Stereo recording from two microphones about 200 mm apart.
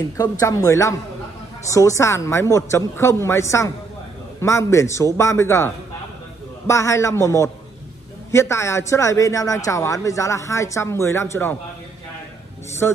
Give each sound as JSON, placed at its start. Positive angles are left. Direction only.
{"t": 0.2, "sound": "speech", "side_deg": 20}
{"t": 6.7, "sound": "speech", "side_deg": 15}
{"t": 12.8, "sound": "speech", "side_deg": 10}